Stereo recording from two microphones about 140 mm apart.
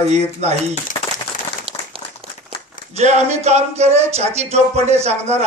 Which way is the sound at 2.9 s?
55° right (ahead or behind).